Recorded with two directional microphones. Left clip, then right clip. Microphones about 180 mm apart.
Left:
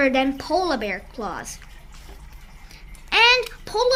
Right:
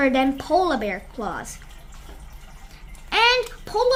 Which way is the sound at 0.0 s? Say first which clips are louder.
Even; 30° right (ahead or behind).